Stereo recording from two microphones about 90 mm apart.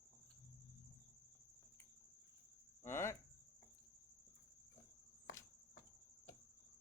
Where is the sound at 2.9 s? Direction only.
30° left (ahead or behind).